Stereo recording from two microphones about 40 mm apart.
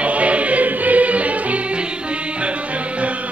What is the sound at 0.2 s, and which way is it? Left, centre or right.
Music, right.